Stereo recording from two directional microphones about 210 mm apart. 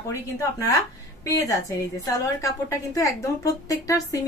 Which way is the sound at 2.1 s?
15° left (ahead or behind).